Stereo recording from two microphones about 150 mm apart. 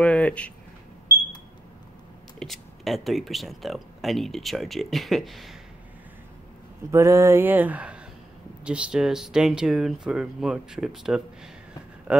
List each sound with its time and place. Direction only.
0.0 s a sound: 10° left (ahead or behind)
2.3 s speech: centre (ahead or behind)
6.9 s speech: 20° right (ahead or behind)